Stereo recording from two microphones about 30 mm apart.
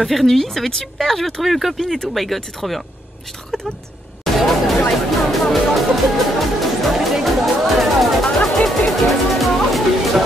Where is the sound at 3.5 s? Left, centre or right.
Centre.